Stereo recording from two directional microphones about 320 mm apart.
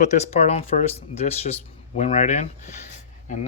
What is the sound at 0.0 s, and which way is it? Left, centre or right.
Speech, left.